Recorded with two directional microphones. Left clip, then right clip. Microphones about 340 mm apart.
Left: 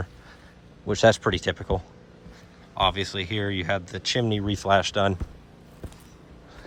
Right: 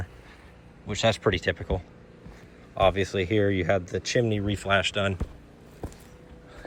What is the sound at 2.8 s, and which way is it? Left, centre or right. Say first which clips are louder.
Speech: right 3 dB; centre.